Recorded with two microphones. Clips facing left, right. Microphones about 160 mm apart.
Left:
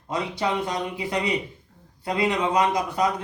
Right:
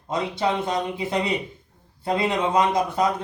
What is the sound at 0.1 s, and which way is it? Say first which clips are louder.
A man's voice: right 2 dB; 25° right (ahead or behind).